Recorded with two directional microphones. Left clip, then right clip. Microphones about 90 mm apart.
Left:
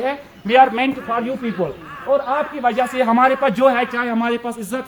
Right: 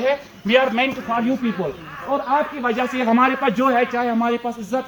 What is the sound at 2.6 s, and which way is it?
Speech, 80° left.